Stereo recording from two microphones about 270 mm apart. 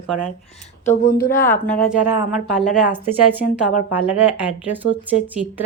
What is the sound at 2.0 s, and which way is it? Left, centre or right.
A woman's voice, centre.